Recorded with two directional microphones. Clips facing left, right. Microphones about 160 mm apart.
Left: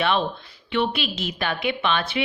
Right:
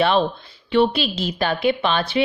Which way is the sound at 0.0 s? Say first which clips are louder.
Right 5 dB; 35° right (ahead or behind).